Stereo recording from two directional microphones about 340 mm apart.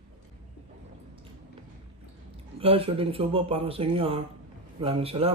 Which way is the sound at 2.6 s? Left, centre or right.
Centre.